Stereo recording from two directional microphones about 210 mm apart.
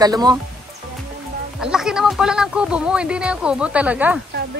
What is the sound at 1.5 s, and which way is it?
Speech, 5° right (ahead or behind).